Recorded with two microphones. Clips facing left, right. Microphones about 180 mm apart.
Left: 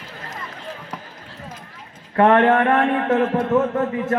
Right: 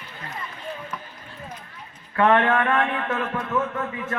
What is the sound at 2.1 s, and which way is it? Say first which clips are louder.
A man's voice: left 5 dB; 40° left (ahead or behind).